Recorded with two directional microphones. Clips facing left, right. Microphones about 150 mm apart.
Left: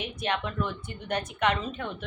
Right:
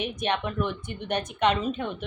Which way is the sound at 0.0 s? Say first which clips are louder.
Right 3 dB; 20° right (ahead or behind).